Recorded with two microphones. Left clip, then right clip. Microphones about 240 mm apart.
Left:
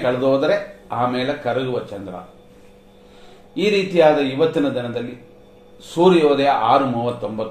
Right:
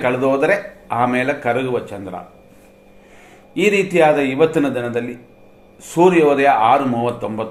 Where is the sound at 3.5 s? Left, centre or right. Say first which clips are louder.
Right 2 dB; right.